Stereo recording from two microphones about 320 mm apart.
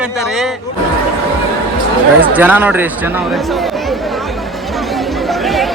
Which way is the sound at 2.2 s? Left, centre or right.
Centre.